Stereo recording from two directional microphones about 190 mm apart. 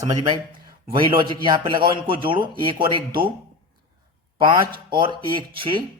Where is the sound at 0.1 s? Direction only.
20° right (ahead or behind).